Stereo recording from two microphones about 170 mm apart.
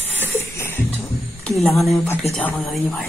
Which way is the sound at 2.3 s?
40° left (ahead or behind).